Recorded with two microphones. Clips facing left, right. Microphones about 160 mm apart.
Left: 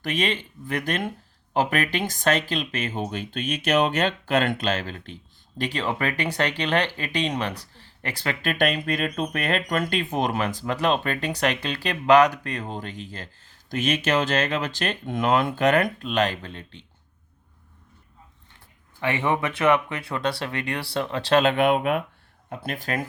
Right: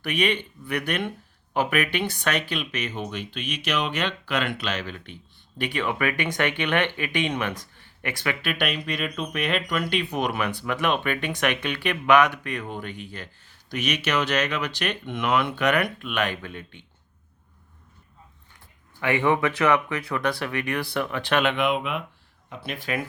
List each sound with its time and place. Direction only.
0.0 s speech: 40° left (ahead or behind)
18.9 s speech: 25° left (ahead or behind)
21.5 s speech: 50° left (ahead or behind)